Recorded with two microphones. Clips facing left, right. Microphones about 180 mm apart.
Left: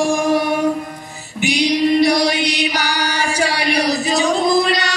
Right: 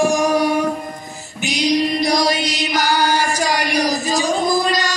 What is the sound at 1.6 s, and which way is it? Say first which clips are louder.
Music: left 3 dB; 65° left (ahead or behind).